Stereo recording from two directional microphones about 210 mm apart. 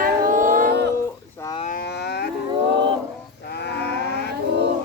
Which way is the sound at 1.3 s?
15° left (ahead or behind).